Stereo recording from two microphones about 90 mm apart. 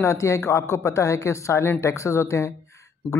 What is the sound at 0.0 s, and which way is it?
Speech, 35° left (ahead or behind).